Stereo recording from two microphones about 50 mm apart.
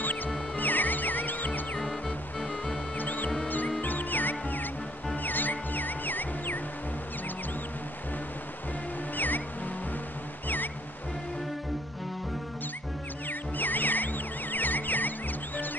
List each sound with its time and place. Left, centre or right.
0.0 s music: left
1.8 s music: centre
3.0 s music: left
9.1 s music: left
13.3 s music: left